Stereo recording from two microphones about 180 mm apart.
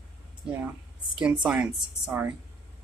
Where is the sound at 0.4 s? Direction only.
5° right (ahead or behind).